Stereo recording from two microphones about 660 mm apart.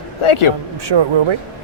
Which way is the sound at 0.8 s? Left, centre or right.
Right.